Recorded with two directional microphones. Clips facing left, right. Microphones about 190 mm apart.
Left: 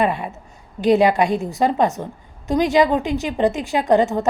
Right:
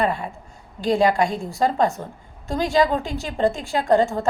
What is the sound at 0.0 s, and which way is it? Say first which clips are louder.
A woman's voice: left 2 dB; 20° left (ahead or behind).